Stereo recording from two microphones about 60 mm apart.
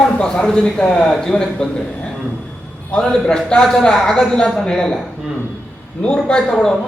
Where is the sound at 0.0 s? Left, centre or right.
Centre.